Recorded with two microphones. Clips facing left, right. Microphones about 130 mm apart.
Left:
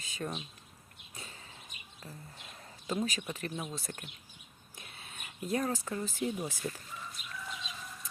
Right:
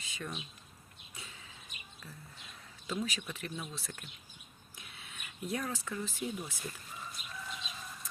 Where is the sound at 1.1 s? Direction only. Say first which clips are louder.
Left 2 dB; 40° left (ahead or behind).